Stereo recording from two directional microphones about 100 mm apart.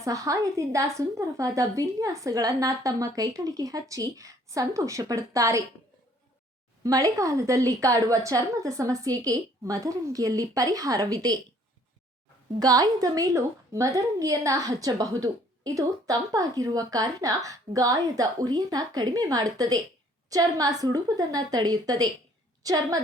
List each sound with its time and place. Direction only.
0.0 s a woman's voice: 35° right (ahead or behind)
6.8 s a woman's voice: 35° right (ahead or behind)
12.5 s a woman's voice: 40° right (ahead or behind)